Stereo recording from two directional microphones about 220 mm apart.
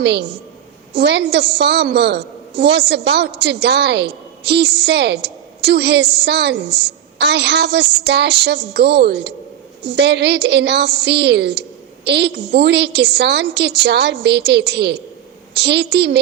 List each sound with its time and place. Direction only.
0.0 s a woman's voice: 50° right (ahead or behind)